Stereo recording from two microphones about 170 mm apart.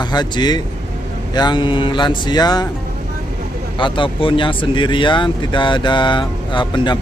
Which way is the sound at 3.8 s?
30° left (ahead or behind).